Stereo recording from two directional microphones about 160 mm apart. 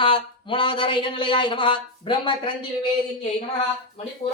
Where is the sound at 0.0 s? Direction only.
30° left (ahead or behind).